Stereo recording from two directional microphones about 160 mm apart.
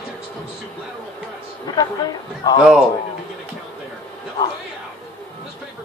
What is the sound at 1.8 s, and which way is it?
Speech, 25° left (ahead or behind).